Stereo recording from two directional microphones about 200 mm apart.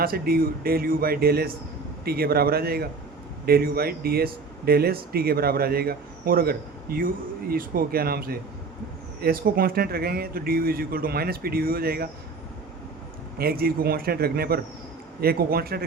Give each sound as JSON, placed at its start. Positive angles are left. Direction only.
{"t": 0.0, "sound": "speech", "side_deg": -50}
{"t": 13.4, "sound": "speech", "side_deg": -50}